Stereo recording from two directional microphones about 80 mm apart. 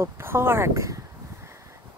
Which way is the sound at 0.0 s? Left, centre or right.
Right.